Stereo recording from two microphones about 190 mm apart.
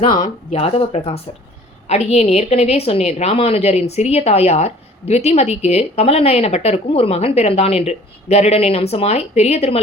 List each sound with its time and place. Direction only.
0.2 s a woman's voice: 30° left (ahead or behind)